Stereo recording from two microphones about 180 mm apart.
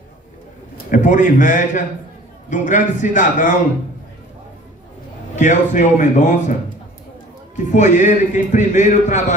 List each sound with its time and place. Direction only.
0.8 s a man's voice: 45° left (ahead or behind)
5.3 s a man's voice: 45° left (ahead or behind)
7.5 s a man's voice: 45° left (ahead or behind)